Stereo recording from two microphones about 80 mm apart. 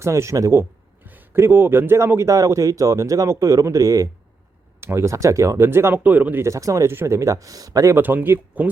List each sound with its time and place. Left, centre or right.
0.0 s speech: right
1.0 s speech: right
6.0 s speech: right
6.4 s a man's voice: right
7.9 s speech: right